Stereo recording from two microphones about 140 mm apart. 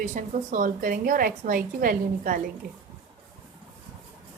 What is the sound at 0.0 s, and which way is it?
A woman's voice, 65° right (ahead or behind).